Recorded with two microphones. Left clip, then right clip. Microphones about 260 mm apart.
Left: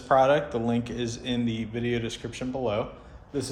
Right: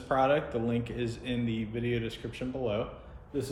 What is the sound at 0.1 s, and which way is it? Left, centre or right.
Speech, left.